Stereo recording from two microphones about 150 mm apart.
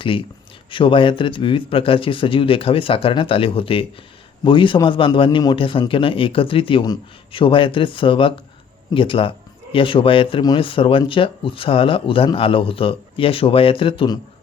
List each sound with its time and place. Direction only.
0.7 s speech: 35° left (ahead or behind)